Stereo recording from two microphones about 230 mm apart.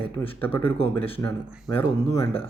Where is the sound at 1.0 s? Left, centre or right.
Left.